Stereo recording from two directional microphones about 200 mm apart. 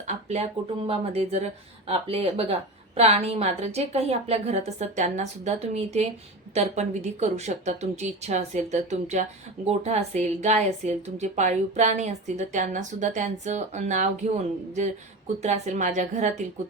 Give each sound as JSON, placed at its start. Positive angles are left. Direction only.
{"t": 0.1, "sound": "a woman's voice", "side_deg": -35}